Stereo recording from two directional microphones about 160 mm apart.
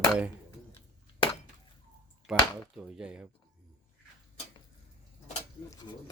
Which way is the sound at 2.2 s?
5° right (ahead or behind).